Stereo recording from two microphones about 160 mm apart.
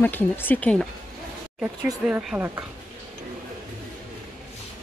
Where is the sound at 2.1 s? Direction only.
10° right (ahead or behind).